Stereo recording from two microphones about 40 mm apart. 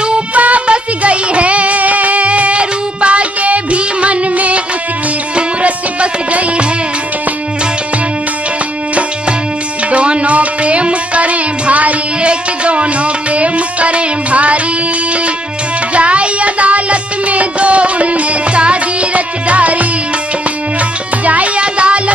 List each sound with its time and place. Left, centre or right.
0.3 s music: right
9.8 s music: right
15.9 s music: right
21.3 s music: right